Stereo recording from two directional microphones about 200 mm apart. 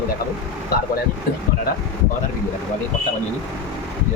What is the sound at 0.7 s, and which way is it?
Speech, 50° left (ahead or behind).